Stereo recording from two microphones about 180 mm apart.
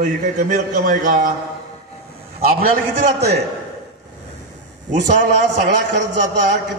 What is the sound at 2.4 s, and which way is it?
Speech, 50° right (ahead or behind).